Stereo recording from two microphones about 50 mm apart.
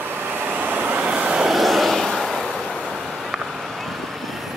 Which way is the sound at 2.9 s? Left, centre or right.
Centre.